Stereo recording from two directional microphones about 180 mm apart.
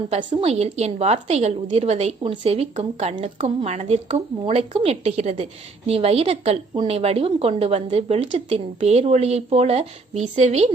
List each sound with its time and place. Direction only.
0.1 s a woman's voice: 35° right (ahead or behind)